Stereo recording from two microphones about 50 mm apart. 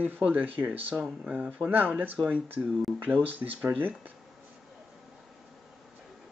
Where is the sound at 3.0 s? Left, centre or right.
Right.